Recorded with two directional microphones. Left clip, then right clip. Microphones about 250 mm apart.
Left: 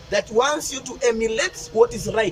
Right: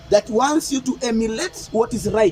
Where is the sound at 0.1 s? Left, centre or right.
Right.